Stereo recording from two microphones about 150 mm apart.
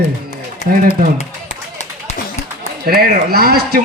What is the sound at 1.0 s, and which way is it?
Speech, 90° right.